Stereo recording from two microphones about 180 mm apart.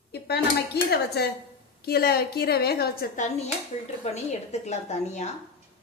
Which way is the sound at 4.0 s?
35° left (ahead or behind).